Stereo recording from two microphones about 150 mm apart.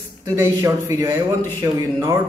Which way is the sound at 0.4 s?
20° right (ahead or behind).